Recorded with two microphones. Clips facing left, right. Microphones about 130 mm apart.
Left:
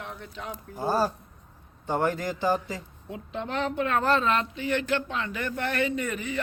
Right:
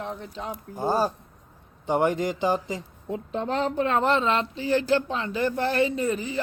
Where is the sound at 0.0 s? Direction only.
30° right (ahead or behind).